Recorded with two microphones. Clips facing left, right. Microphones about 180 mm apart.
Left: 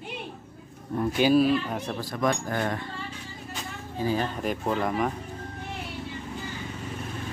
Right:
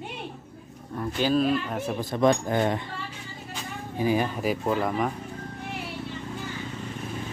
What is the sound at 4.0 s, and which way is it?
Speech, 15° right (ahead or behind).